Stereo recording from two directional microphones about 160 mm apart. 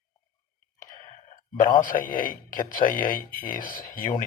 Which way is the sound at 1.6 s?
55° left (ahead or behind).